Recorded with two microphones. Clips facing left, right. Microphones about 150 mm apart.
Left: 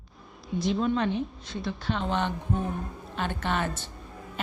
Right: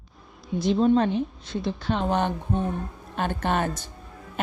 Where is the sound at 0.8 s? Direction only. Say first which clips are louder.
Right 9 dB; 40° right (ahead or behind).